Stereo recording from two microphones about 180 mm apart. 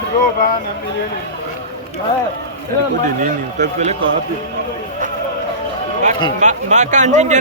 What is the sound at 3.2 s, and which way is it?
Speech, 45° right (ahead or behind).